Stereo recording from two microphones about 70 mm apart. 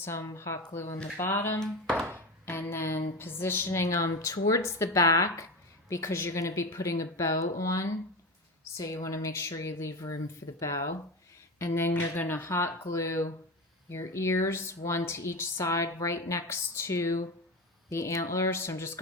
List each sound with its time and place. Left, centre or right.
0.0 s a woman's voice: left
3.8 s speech: left
5.9 s speech: left
11.6 s speech: left